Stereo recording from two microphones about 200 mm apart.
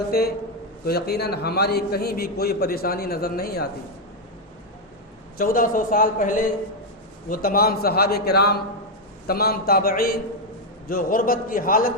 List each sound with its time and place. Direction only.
0.1 s a man's voice: 50° left (ahead or behind)
5.4 s a man's voice: 45° left (ahead or behind)